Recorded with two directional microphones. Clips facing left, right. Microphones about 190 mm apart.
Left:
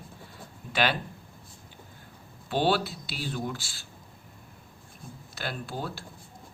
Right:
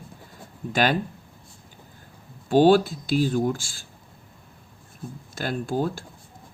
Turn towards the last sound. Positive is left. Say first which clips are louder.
# right 10 dB
turn(degrees=-45)  # may be behind; listen again after turning